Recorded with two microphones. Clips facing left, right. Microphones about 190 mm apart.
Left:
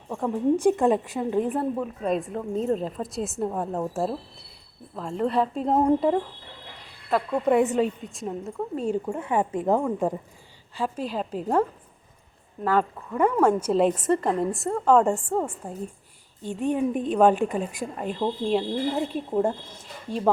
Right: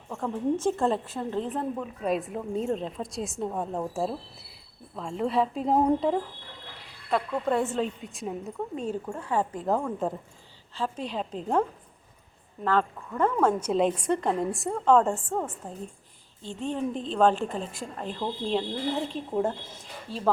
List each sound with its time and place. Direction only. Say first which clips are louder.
0.1 s a woman's voice: left 5 dB; 15° left (ahead or behind)
2.0 s a woman's voice: left 2 dB; centre (ahead or behind)
7.4 s a woman's voice: left 9 dB; 15° left (ahead or behind)
8.0 s a woman's voice: left 2 dB; centre (ahead or behind)
8.8 s a woman's voice: left 5 dB; 15° left (ahead or behind)
12.6 s a woman's voice: left 2 dB; 10° left (ahead or behind)